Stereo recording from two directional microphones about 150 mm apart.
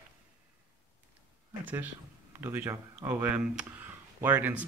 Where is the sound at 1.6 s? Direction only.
10° right (ahead or behind).